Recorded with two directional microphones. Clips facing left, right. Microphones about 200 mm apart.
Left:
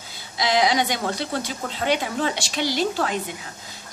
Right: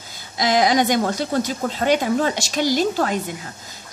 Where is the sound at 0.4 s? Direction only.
45° right (ahead or behind).